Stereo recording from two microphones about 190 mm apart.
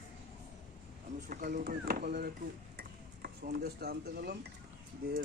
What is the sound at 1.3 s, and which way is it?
Speech, 50° right (ahead or behind).